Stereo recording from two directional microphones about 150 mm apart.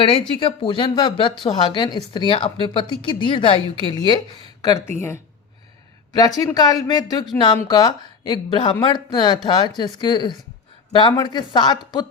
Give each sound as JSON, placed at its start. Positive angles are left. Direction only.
{"t": 0.0, "sound": "a woman's voice", "side_deg": 35}